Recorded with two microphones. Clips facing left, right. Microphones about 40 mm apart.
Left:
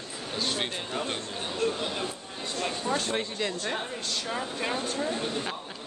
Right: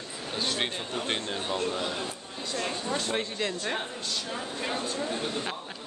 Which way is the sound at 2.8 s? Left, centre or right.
Left.